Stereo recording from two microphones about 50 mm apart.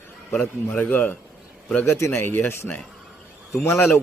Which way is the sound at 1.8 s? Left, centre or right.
Left.